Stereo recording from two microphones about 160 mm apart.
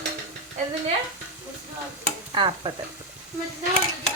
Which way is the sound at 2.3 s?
30° right (ahead or behind).